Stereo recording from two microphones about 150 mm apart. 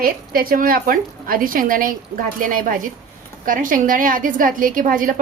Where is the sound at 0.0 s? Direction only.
75° right (ahead or behind).